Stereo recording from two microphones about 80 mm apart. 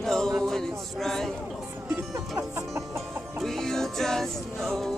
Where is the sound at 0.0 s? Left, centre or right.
Centre.